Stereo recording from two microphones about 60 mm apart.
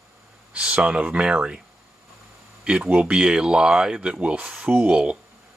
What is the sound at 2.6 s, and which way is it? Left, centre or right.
Speech, centre.